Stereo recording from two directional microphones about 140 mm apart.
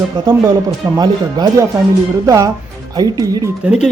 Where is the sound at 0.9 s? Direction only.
30° right (ahead or behind).